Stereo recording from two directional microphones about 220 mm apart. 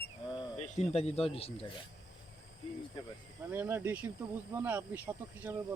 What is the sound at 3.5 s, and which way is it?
Speech, 10° right (ahead or behind).